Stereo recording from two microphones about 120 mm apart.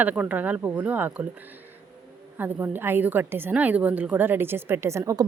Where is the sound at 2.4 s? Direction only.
15° right (ahead or behind).